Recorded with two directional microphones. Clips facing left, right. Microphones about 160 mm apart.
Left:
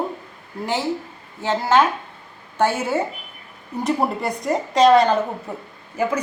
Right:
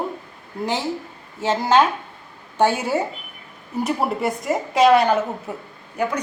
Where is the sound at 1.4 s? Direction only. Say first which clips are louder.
Right 1 dB; 20° right (ahead or behind).